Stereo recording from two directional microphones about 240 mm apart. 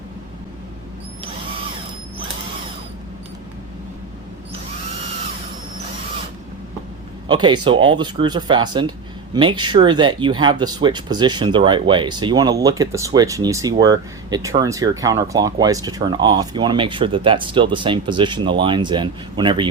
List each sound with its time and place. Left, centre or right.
7.3 s speech: centre